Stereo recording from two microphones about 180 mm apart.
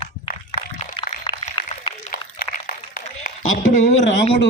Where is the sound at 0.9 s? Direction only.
30° left (ahead or behind).